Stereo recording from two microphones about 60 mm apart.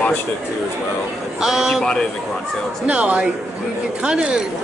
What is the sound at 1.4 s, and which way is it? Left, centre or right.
Speech, centre.